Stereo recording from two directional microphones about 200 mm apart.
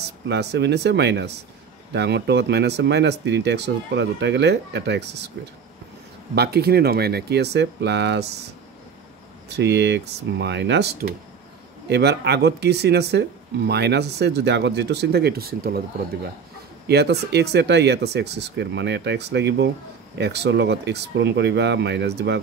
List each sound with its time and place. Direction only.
0.3 s speech: 60° right (ahead or behind)
6.3 s speech: 50° right (ahead or behind)
9.5 s speech: 60° right (ahead or behind)
16.8 s speech: 55° right (ahead or behind)